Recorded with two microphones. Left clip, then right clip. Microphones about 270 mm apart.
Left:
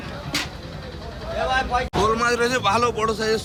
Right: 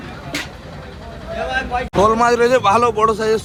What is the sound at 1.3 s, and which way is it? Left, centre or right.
Speech, left.